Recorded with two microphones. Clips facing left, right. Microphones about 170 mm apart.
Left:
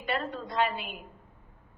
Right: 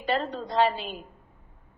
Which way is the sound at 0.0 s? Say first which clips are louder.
Right 4 dB; 30° right (ahead or behind).